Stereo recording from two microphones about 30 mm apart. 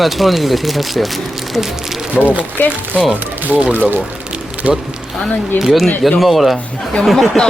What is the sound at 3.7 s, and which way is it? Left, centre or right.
Speech, right.